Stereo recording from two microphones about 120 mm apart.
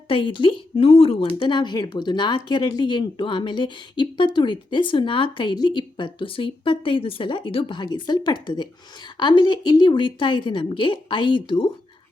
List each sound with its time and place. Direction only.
0.1 s a woman's voice: 45° left (ahead or behind)